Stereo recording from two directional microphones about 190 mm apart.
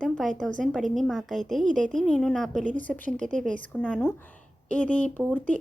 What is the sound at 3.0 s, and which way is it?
Speech, 40° right (ahead or behind).